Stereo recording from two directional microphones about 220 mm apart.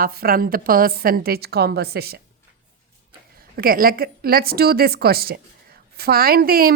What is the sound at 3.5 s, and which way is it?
A woman's voice, 40° right (ahead or behind).